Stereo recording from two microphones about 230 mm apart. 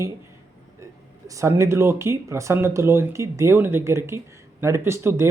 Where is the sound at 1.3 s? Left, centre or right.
Centre.